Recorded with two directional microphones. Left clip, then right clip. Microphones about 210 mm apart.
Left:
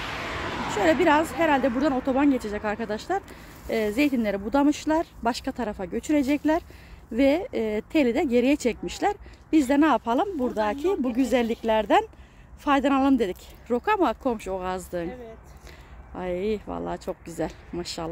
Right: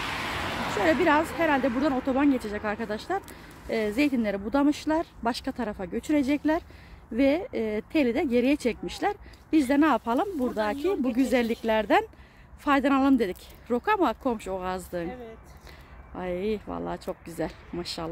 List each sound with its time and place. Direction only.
0.0 s a sound: 40° right (ahead or behind)
1.4 s speech: 10° left (ahead or behind)
16.2 s speech: 5° left (ahead or behind)